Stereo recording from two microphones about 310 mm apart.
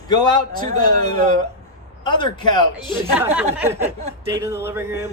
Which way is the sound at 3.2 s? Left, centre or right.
Centre.